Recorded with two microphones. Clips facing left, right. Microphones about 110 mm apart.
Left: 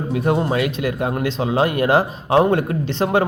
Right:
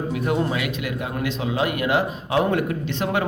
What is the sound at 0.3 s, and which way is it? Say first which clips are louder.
Speech: left 5 dB; 35° left (ahead or behind).